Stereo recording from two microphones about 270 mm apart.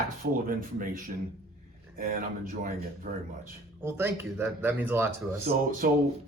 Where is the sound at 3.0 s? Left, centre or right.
Right.